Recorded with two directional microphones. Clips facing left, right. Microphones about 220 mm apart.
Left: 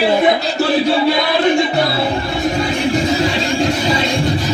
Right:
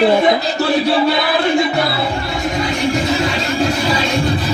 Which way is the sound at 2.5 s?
30° left (ahead or behind).